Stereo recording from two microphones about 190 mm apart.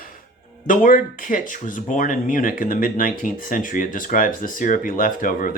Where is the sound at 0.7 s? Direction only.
45° left (ahead or behind).